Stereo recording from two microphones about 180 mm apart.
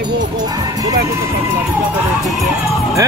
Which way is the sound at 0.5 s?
20° right (ahead or behind).